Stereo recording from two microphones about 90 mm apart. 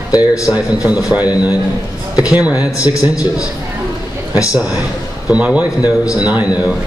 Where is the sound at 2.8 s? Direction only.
40° left (ahead or behind).